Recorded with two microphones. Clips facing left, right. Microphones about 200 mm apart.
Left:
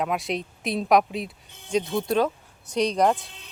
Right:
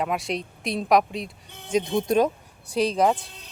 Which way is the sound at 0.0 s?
Centre (ahead or behind).